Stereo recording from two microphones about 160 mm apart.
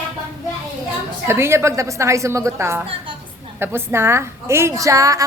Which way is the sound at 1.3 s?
15° right (ahead or behind).